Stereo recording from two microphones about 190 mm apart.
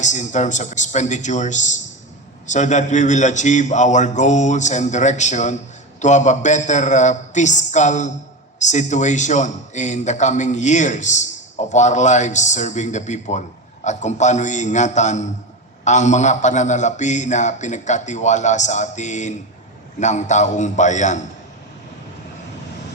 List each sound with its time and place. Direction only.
0.0 s speech: 40° left (ahead or behind)